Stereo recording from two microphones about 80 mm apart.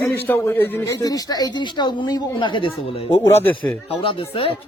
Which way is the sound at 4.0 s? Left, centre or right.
Left.